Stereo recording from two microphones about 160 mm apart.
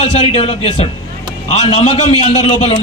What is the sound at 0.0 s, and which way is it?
A man's voice, 35° left (ahead or behind).